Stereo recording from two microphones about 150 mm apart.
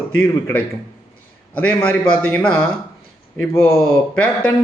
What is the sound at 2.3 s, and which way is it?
Speech, 10° left (ahead or behind).